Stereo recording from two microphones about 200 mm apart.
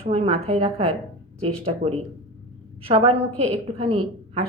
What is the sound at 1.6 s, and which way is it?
A woman's voice, 30° right (ahead or behind).